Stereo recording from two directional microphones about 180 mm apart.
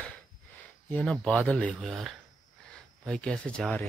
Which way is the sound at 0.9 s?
5° left (ahead or behind).